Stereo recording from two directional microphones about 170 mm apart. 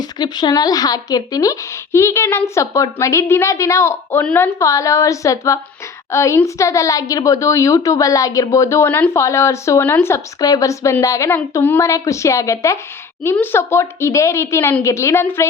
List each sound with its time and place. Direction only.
0.0 s a woman's voice: 25° left (ahead or behind)